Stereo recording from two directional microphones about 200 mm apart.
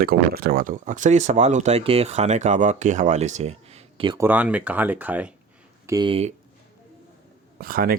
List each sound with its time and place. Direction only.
0.0 s speech: 50° right (ahead or behind); by 4.2 s 25° right (ahead or behind)
4.2 s speech: 10° right (ahead or behind)
5.8 s speech: 20° right (ahead or behind)
7.6 s speech: 45° right (ahead or behind)